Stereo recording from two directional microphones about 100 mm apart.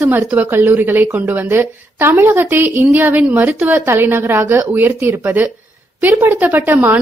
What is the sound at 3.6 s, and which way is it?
A woman's voice, 25° right (ahead or behind).